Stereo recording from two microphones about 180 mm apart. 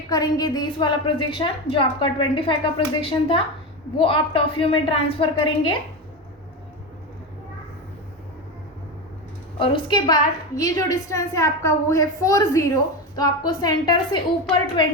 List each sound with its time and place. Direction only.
0.1 s a woman's voice: 20° left (ahead or behind)
9.6 s a woman's voice: 25° left (ahead or behind)